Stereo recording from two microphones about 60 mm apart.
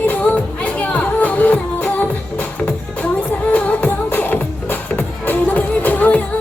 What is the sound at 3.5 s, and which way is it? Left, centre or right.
Music, left.